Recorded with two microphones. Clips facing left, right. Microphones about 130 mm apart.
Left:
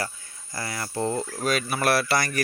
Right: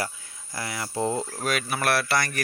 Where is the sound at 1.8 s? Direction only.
10° left (ahead or behind).